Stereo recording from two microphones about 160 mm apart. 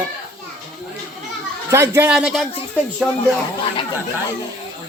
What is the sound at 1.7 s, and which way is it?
Speech, 15° right (ahead or behind).